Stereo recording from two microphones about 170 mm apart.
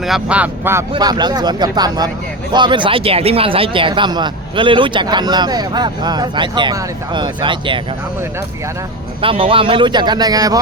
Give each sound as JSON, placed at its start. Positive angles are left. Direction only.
{"t": 0.0, "sound": "speech", "side_deg": -5}
{"t": 0.9, "sound": "speech", "side_deg": -25}
{"t": 9.2, "sound": "speech", "side_deg": -30}